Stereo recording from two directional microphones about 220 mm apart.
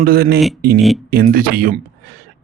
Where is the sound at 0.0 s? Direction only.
45° right (ahead or behind).